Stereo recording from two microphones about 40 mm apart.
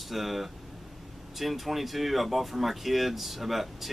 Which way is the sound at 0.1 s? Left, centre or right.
Centre.